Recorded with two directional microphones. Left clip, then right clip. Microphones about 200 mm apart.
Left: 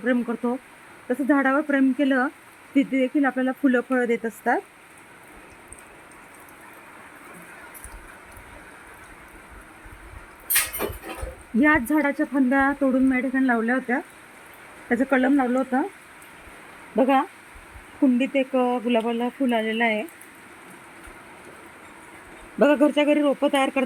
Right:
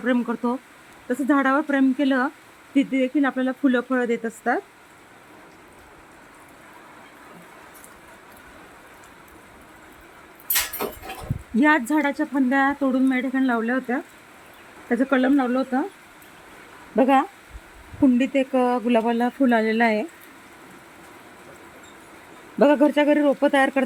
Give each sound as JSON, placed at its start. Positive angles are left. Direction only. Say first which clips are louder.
{"t": 0.0, "sound": "speech", "louder": "right 1 dB", "side_deg": 0}
{"t": 11.6, "sound": "speech", "louder": "right 1 dB", "side_deg": 0}
{"t": 16.9, "sound": "speech", "louder": "right 2 dB", "side_deg": -10}
{"t": 22.5, "sound": "speech", "louder": "right 1 dB", "side_deg": -5}